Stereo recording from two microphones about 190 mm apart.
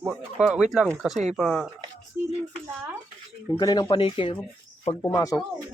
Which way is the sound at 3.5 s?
20° left (ahead or behind).